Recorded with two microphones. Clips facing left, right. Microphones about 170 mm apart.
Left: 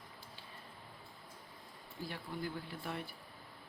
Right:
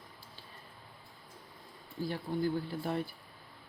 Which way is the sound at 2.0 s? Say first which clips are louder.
Right 9 dB; 35° right (ahead or behind).